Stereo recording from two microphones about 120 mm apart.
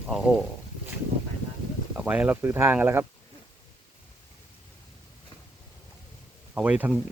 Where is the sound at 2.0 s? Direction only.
10° right (ahead or behind).